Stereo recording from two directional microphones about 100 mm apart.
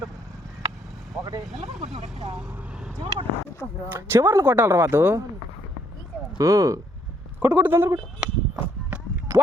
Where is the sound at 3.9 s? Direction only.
25° right (ahead or behind).